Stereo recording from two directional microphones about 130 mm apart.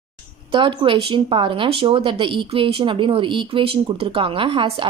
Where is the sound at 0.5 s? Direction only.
40° right (ahead or behind).